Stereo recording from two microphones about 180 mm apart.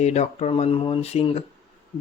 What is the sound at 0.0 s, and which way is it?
A man's voice, 35° left (ahead or behind).